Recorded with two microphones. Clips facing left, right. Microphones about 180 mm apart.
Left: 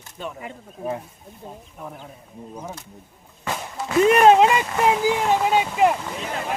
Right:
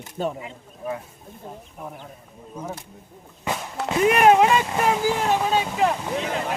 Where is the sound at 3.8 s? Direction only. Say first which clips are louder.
Right 5 dB; 65° right (ahead or behind).